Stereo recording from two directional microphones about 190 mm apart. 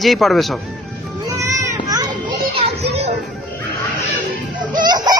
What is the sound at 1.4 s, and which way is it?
Children playing, 15° right (ahead or behind).